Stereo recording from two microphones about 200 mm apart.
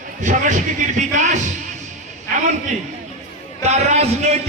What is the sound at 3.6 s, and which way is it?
Speech, 35° right (ahead or behind).